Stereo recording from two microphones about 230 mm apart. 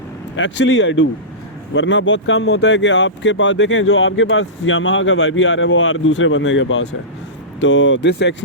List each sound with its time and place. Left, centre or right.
0.3 s speech: left